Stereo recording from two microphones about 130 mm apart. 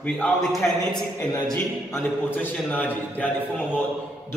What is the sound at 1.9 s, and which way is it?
A man's voice, 10° left (ahead or behind).